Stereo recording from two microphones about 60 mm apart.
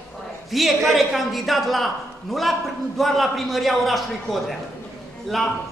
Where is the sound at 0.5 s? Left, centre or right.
Centre.